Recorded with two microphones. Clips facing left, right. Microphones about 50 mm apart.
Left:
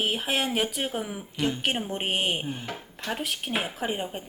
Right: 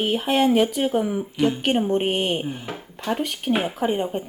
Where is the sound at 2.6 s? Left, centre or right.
Centre.